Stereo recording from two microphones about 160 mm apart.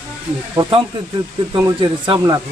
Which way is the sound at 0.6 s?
25° right (ahead or behind).